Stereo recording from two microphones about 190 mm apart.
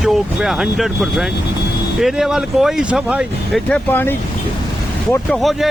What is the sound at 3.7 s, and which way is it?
Speech, 10° left (ahead or behind).